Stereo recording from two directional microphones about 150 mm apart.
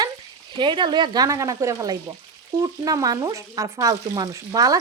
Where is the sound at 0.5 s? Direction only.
30° right (ahead or behind).